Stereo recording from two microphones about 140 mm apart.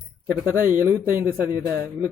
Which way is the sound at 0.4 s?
15° right (ahead or behind).